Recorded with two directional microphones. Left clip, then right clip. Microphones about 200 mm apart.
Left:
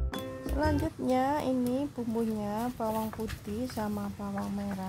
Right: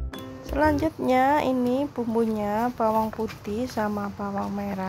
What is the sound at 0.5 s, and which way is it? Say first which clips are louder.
Speech: right 9 dB; 10° right (ahead or behind).